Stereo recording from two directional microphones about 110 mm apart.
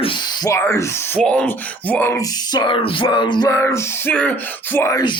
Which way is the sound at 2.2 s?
40° left (ahead or behind).